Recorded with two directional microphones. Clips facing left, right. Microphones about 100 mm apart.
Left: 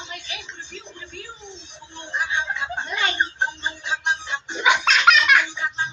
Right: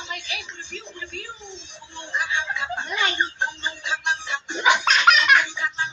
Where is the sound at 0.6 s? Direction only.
60° right (ahead or behind).